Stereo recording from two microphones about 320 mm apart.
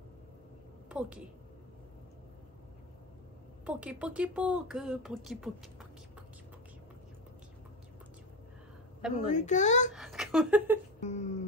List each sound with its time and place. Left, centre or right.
0.8 s a woman's voice: centre
3.6 s speech: centre
9.1 s a child's voice: left
9.9 s speech: centre
11.0 s a sound: left